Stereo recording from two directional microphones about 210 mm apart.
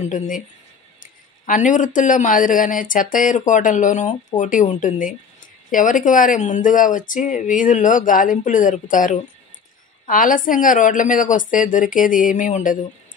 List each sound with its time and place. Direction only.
0.0 s speech: 35° left (ahead or behind)
1.4 s speech: 35° left (ahead or behind)